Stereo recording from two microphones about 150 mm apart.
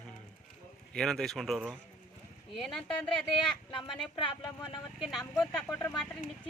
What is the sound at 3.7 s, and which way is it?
Speech, 30° left (ahead or behind).